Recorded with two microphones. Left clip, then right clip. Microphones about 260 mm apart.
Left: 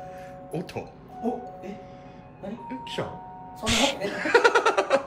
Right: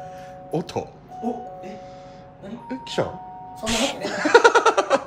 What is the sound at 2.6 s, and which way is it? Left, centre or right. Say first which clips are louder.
Music: right 7 dB; centre.